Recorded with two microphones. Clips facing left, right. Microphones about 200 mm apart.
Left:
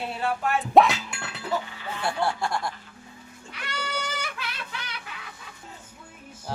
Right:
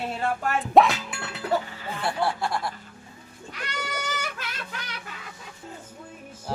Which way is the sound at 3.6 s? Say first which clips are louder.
Even; 45° right (ahead or behind).